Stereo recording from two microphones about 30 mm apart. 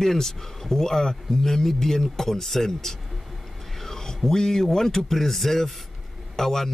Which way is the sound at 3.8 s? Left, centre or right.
Centre.